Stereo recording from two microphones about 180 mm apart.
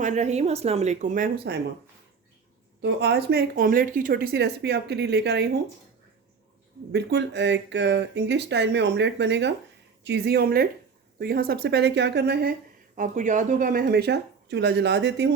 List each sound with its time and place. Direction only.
0.0 s speech: 40° right (ahead or behind)
2.8 s a woman's voice: 65° right (ahead or behind)
6.9 s a woman's voice: 70° right (ahead or behind)
13.0 s a woman's voice: 45° right (ahead or behind); by 15.3 s 70° right (ahead or behind)